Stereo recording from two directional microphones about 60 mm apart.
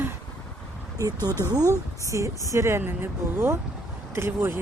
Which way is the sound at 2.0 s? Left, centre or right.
Right.